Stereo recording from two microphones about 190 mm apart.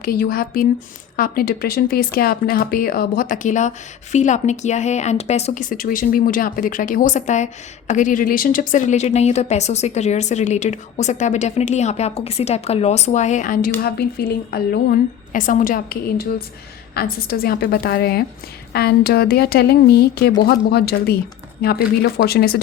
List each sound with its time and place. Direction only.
0.0 s speech: 50° left (ahead or behind)
13.8 s a woman's voice: 55° left (ahead or behind)